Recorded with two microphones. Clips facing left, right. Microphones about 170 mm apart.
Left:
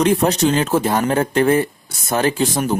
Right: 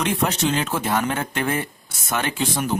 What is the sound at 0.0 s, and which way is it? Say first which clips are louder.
Speech: left 7 dB; 35° left (ahead or behind).